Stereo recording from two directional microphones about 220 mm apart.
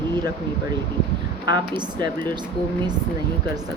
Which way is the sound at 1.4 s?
20° right (ahead or behind).